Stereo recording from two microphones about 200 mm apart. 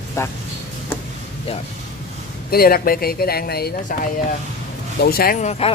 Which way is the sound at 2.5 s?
50° left (ahead or behind).